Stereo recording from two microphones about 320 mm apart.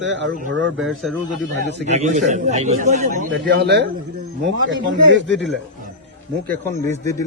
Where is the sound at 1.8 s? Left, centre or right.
Right.